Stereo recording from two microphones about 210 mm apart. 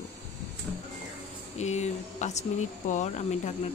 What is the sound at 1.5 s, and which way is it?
Speech, 30° left (ahead or behind).